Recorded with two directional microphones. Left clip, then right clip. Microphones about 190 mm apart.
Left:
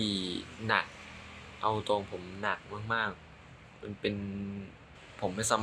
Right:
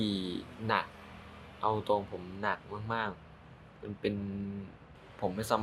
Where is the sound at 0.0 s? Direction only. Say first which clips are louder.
Left 2 dB; 10° right (ahead or behind).